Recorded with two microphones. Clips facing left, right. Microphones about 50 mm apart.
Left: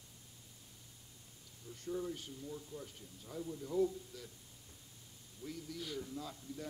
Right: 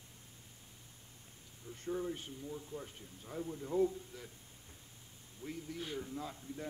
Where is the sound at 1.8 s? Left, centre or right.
Right.